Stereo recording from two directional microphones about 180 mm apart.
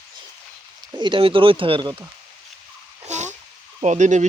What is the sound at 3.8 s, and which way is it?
Speech, 40° right (ahead or behind).